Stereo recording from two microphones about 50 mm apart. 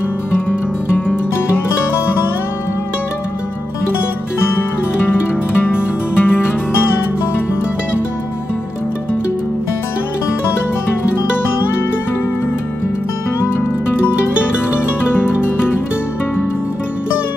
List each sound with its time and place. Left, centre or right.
0.5 s music: left
5.5 s music: left